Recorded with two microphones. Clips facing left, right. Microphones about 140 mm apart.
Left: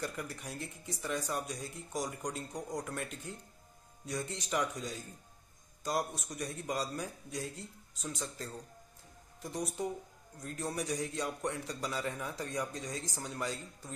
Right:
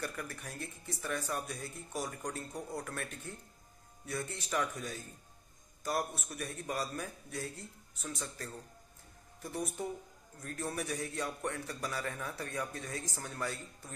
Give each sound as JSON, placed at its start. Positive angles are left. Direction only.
{"t": 0.0, "sound": "a man's voice", "side_deg": 15}